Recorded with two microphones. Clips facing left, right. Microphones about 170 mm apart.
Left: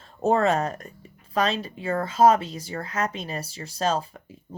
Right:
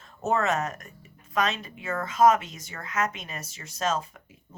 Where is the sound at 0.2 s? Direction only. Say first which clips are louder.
Left 5 dB; 30° left (ahead or behind).